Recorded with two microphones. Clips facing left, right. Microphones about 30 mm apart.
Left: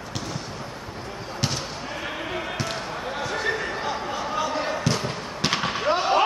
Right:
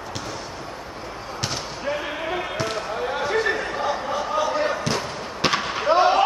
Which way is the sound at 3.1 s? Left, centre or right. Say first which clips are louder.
Right 6 dB; centre.